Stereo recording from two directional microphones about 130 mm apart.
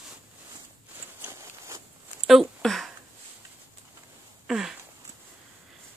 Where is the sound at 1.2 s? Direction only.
20° right (ahead or behind).